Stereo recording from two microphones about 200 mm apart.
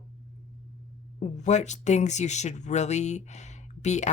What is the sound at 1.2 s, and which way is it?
Speech, 35° left (ahead or behind).